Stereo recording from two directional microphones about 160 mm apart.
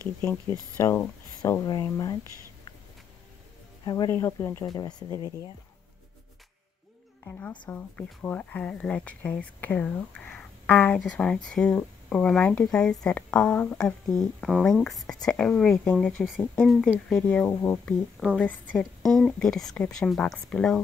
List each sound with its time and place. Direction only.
0.2 s speech: 15° left (ahead or behind)
3.8 s speech: 20° left (ahead or behind)
7.2 s speech: 10° left (ahead or behind)